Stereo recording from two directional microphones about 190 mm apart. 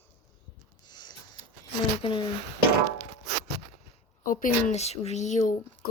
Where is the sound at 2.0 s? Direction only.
25° left (ahead or behind).